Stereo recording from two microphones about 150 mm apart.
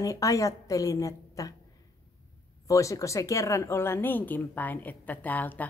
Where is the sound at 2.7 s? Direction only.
20° left (ahead or behind).